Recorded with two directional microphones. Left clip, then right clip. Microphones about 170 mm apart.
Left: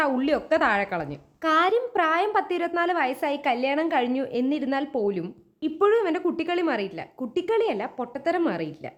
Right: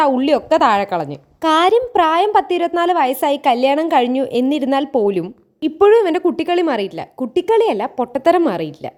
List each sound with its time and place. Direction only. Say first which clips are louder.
0.0 s a woman's voice: right 9 dB; 30° right (ahead or behind); by 8.4 s 50° right (ahead or behind)
8.4 s a woman's voice: right 9 dB; 35° right (ahead or behind)